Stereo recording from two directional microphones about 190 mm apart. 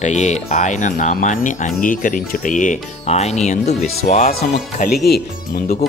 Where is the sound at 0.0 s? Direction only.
40° left (ahead or behind).